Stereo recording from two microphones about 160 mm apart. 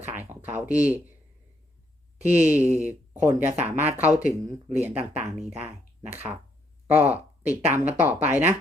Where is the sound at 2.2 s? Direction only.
10° right (ahead or behind).